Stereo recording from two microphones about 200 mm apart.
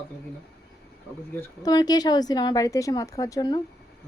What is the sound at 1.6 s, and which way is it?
A woman's voice, 20° left (ahead or behind).